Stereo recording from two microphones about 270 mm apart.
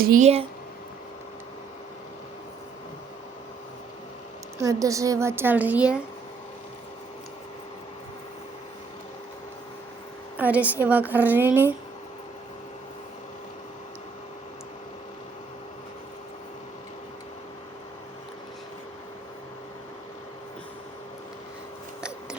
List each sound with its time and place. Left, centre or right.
0.0 s speech: right
4.5 s a woman's voice: centre
10.3 s a woman's voice: centre